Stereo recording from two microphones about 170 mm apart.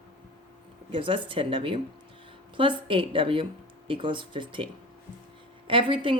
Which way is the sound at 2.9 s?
30° right (ahead or behind).